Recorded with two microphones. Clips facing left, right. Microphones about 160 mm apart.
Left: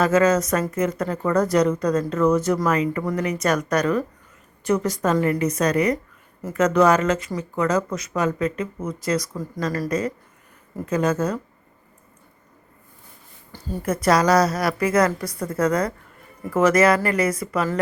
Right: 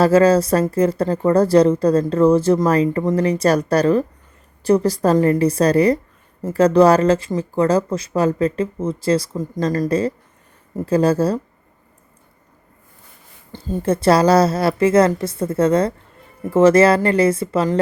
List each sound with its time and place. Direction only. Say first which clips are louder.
0.0 s speech: right 5 dB; 30° right (ahead or behind)
13.5 s speech: right 6 dB; 20° right (ahead or behind)